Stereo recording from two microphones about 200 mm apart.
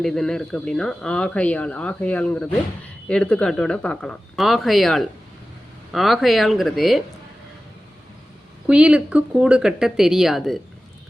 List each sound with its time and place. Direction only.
0.0 s speech: centre (ahead or behind)
8.6 s speech: 5° right (ahead or behind)